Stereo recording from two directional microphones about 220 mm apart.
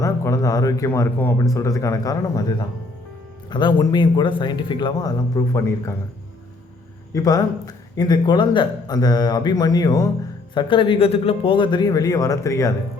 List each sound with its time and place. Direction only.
0.0 s speech: 15° left (ahead or behind)
3.5 s a man's voice: 20° left (ahead or behind)
7.1 s a man's voice: 15° left (ahead or behind)